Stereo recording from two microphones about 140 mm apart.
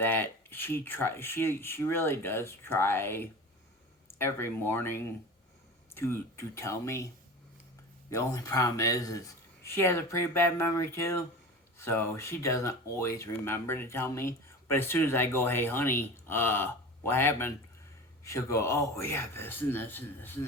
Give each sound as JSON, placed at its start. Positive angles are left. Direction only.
{"t": 0.0, "sound": "speech", "side_deg": 15}
{"t": 8.1, "sound": "speech", "side_deg": 25}